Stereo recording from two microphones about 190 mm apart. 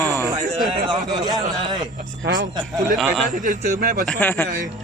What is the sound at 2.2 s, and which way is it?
Speech, 60° right (ahead or behind).